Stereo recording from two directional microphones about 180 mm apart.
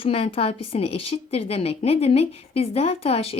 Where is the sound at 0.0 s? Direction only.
30° left (ahead or behind).